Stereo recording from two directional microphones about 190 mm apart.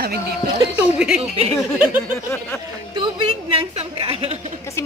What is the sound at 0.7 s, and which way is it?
Speech, 5° right (ahead or behind).